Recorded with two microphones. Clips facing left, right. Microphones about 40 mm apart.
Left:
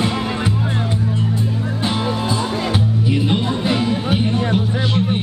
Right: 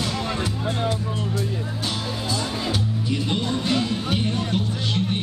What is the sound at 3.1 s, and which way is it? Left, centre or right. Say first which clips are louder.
Music: left 4 dB; left.